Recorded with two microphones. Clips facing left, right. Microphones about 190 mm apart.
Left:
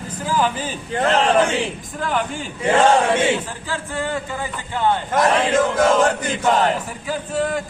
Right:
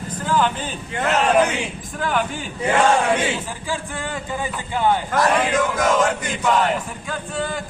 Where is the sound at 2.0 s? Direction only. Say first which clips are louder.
Even; centre (ahead or behind).